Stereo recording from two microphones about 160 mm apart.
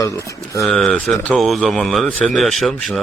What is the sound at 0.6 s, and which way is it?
Speech, centre (ahead or behind).